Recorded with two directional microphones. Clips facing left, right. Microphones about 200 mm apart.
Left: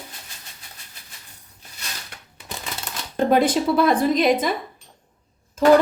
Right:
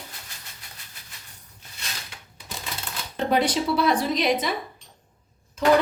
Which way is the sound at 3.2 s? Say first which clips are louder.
Left 5 dB; 50° left (ahead or behind).